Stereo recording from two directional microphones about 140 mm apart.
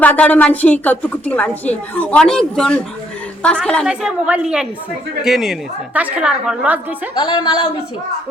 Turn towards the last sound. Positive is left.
turn(degrees=40)  # may be behind; listen again after turning